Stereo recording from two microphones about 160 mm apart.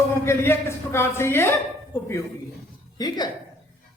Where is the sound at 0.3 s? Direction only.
15° left (ahead or behind).